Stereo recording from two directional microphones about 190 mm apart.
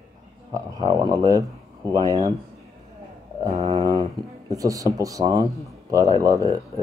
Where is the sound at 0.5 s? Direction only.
20° right (ahead or behind).